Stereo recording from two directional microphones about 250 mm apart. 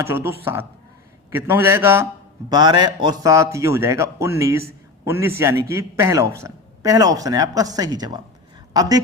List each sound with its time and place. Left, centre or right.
0.0 s a man's voice: centre